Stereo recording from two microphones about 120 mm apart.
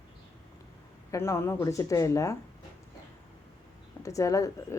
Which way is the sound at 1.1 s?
20° left (ahead or behind).